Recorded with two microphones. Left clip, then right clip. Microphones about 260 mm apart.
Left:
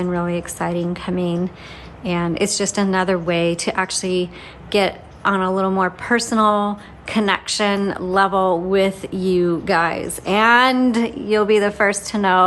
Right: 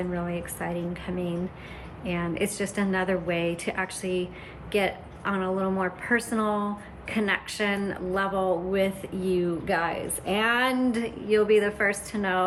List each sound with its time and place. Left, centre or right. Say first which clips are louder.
0.0 s a woman's voice: left 9 dB; centre